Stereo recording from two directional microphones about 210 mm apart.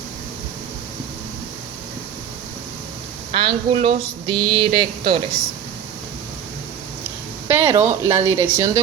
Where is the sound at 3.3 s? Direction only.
25° right (ahead or behind).